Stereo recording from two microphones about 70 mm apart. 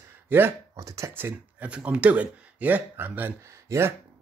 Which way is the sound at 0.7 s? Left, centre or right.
Right.